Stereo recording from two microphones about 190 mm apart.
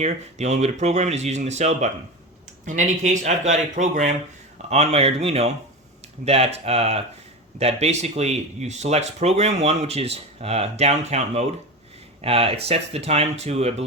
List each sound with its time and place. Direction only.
0.0 s speech: 35° right (ahead or behind)